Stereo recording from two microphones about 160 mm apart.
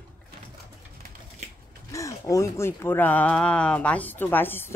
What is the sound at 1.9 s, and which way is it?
Speech, 20° left (ahead or behind).